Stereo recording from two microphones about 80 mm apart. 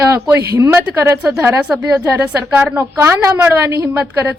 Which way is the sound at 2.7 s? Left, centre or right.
Right.